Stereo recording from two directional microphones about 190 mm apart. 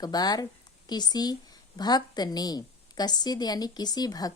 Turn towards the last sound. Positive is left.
turn(degrees=20)  # may be behind; listen again after turning